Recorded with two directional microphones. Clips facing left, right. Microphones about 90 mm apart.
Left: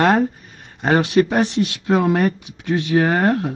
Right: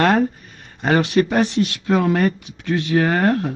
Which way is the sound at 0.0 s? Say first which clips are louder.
Left 1 dB; 10° left (ahead or behind).